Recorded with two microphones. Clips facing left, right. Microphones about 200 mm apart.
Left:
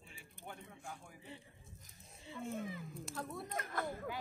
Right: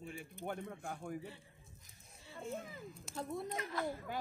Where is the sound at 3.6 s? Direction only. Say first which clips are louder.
Right 2 dB; 50° left (ahead or behind).